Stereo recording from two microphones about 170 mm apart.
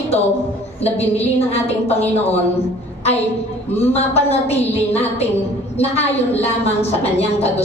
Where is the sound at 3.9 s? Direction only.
40° left (ahead or behind).